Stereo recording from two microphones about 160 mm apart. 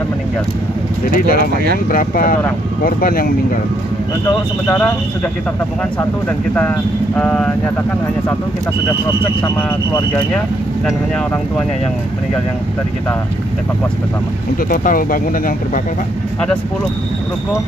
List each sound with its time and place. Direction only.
1.1 s speech: 60° left (ahead or behind)
4.3 s speech: 15° left (ahead or behind)
5.9 s speech: 10° left (ahead or behind)
14.7 s speech: 60° left (ahead or behind)